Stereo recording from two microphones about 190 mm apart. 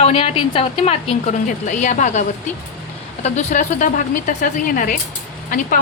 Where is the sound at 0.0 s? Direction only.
30° left (ahead or behind).